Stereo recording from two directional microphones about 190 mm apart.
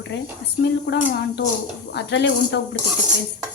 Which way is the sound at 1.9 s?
65° left (ahead or behind).